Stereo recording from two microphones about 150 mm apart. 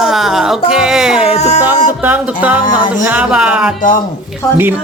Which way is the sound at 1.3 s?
45° left (ahead or behind).